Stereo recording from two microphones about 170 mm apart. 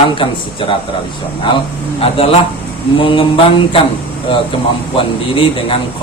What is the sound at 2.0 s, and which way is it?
Speech, 35° left (ahead or behind).